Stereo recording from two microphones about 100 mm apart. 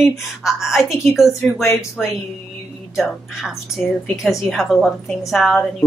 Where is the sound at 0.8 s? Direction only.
25° left (ahead or behind).